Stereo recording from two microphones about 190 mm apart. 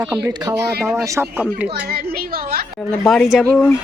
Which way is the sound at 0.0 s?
5° right (ahead or behind).